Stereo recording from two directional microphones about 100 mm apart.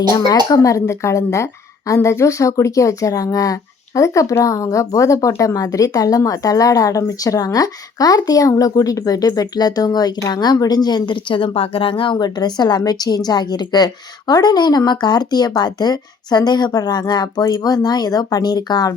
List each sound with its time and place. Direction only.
0.1 s a woman's voice: 40° left (ahead or behind); by 12.1 s 60° left (ahead or behind)
12.1 s a woman's voice: 45° left (ahead or behind)